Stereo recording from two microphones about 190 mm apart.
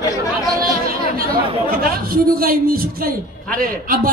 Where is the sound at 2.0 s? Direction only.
50° right (ahead or behind).